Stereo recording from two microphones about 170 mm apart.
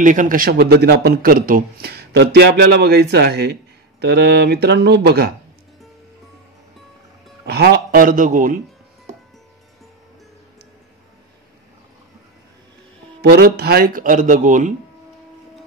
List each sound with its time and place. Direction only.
0.0 s a man's voice: 50° right (ahead or behind); by 5.3 s 80° right
7.4 s a man's voice: 70° right (ahead or behind); by 8.5 s 50° right (ahead or behind)
13.2 s speech: 65° right (ahead or behind); by 14.7 s 45° right (ahead or behind)